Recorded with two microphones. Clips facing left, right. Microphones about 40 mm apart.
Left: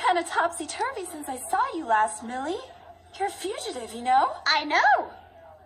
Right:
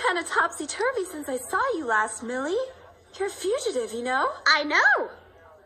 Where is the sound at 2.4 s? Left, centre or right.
Left.